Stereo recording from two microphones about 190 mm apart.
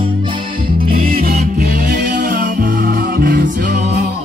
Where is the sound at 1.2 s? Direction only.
50° right (ahead or behind).